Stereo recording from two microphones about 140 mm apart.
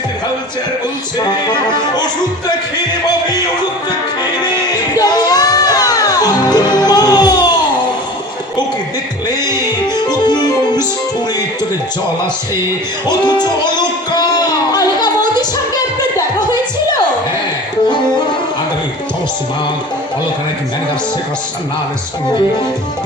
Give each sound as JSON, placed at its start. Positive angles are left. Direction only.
{"t": 4.4, "sound": "music", "side_deg": 30}
{"t": 9.5, "sound": "music", "side_deg": 30}
{"t": 13.1, "sound": "music", "side_deg": 30}